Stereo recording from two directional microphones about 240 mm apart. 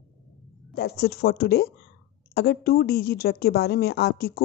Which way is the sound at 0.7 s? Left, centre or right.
Left.